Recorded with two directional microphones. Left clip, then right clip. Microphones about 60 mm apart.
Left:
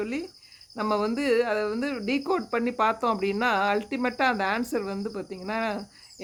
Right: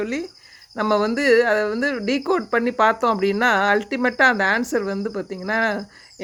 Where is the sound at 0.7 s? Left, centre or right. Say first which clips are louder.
Right 7 dB; right.